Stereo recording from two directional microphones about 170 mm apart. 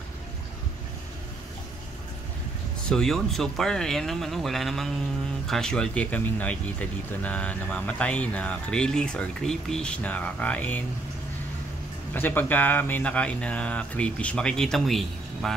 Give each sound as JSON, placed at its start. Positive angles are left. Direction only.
{"t": 2.9, "sound": "speech", "side_deg": 5}
{"t": 12.1, "sound": "speech", "side_deg": 10}